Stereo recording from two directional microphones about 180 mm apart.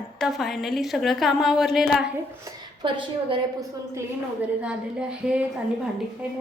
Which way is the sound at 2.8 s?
25° right (ahead or behind).